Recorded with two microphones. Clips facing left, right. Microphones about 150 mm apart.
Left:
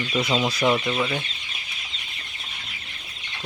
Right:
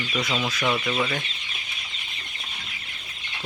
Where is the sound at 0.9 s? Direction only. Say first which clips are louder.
Left 1 dB; 5° left (ahead or behind).